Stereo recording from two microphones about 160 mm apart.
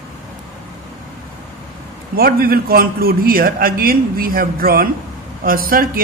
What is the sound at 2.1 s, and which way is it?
A man's voice, 70° right (ahead or behind).